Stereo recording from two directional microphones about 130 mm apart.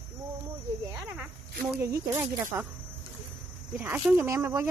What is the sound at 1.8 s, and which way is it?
Speech, 20° right (ahead or behind).